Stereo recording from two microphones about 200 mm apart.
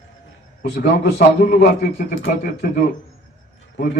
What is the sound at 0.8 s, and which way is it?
A man's voice, 55° left (ahead or behind).